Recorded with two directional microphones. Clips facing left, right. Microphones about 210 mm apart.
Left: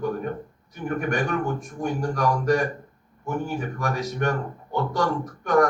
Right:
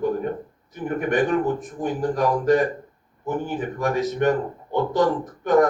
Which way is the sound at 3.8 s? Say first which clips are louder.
Right 7 dB; 20° right (ahead or behind).